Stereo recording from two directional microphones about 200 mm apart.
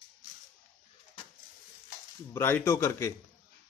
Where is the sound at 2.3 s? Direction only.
15° left (ahead or behind).